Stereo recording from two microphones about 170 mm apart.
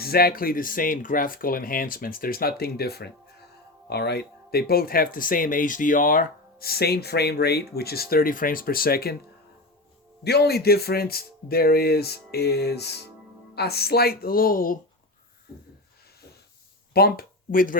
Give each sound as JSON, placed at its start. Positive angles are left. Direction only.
{"t": 0.0, "sound": "speech", "side_deg": 65}
{"t": 10.2, "sound": "speech", "side_deg": 70}
{"t": 16.9, "sound": "speech", "side_deg": 65}